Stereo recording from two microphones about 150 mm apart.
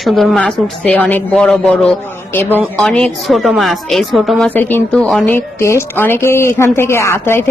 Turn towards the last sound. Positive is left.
turn(degrees=15)  # may be behind; listen again after turning